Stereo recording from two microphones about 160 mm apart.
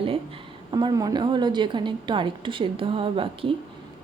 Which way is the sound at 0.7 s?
25° right (ahead or behind).